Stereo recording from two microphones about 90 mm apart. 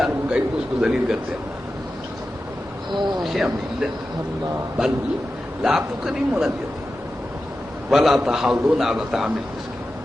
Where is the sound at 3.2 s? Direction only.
5° right (ahead or behind).